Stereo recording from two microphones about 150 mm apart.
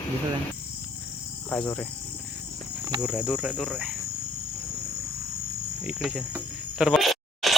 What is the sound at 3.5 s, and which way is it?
Cricket, 5° left (ahead or behind).